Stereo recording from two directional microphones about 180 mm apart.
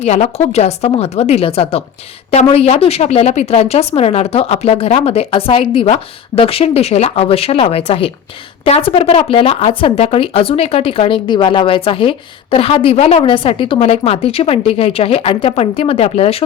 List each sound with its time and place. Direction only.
0.0 s speech: 35° left (ahead or behind)